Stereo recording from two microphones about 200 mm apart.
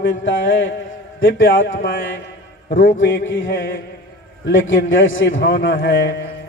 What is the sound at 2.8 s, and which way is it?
A man's voice, 70° left (ahead or behind).